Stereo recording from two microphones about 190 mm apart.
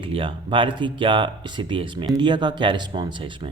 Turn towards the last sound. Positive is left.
turn(degrees=-25)  # may be behind; listen again after turning